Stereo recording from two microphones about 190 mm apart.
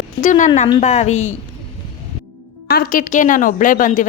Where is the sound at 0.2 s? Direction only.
40° left (ahead or behind).